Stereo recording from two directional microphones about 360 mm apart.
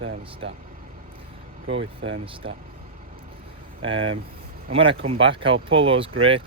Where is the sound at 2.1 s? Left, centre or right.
Centre.